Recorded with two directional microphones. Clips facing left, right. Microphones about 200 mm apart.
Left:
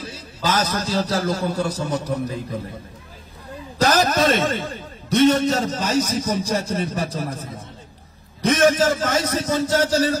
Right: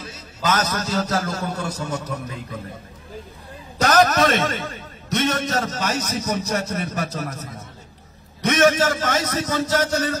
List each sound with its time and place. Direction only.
0.0 s a sound: 30° left (ahead or behind)
0.7 s a man's voice: 30° left (ahead or behind)
3.8 s a man's voice: 30° left (ahead or behind)